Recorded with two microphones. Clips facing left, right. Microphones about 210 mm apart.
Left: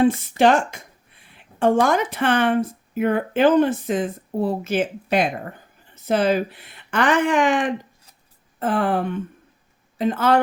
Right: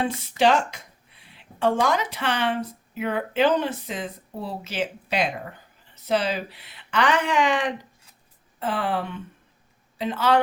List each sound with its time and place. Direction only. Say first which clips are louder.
0.0 s a woman's voice: left 5 dB; 50° left (ahead or behind)